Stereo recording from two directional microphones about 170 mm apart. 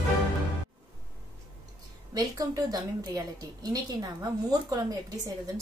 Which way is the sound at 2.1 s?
20° right (ahead or behind).